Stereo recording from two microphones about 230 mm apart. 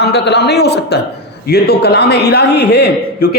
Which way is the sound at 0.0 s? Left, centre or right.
Left.